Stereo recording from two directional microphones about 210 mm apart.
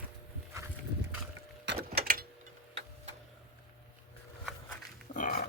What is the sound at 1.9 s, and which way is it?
Typewriter, 45° right (ahead or behind).